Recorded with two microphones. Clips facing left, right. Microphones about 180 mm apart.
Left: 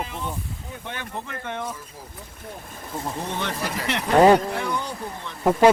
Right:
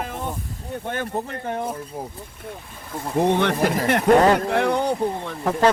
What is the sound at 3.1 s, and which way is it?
Speech, 60° right (ahead or behind).